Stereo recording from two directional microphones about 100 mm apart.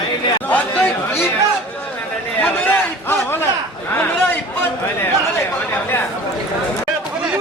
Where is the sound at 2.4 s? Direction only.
20° left (ahead or behind).